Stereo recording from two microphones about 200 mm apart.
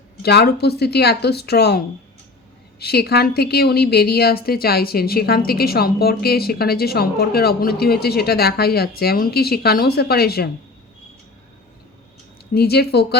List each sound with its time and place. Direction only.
0.2 s a woman's voice: 55° left (ahead or behind)
12.5 s a woman's voice: 55° left (ahead or behind)